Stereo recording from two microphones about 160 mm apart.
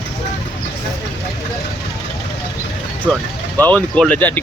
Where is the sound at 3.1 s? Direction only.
5° left (ahead or behind).